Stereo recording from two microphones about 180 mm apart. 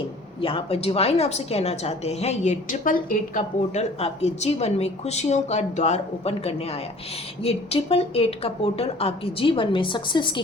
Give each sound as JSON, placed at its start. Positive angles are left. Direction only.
{"t": 0.4, "sound": "a woman's voice", "side_deg": 35}